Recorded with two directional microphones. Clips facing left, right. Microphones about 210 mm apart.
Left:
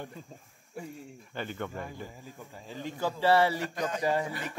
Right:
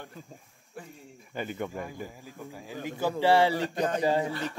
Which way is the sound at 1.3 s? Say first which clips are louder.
Right 3 dB; 10° right (ahead or behind).